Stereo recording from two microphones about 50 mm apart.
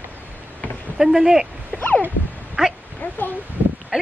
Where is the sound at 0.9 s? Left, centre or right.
Centre.